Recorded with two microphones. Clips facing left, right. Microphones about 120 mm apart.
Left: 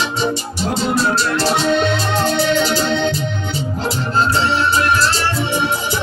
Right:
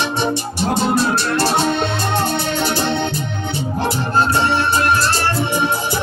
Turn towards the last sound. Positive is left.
turn(degrees=-50)  # may be behind; listen again after turning